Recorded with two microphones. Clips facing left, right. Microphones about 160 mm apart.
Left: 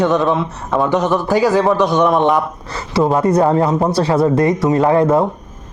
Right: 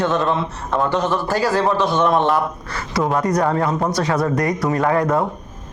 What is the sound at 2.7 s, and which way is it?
Speech, 30° left (ahead or behind).